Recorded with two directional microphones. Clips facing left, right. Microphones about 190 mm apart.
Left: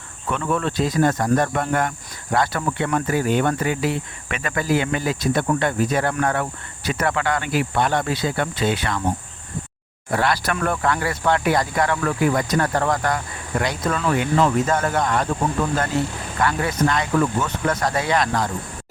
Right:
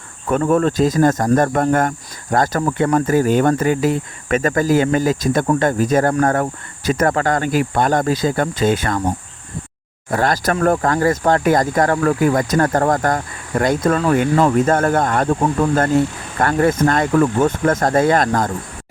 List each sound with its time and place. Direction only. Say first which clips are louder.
0.3 s speech: right 8 dB; 45° right (ahead or behind)
10.1 s speech: right 4 dB; 45° right (ahead or behind)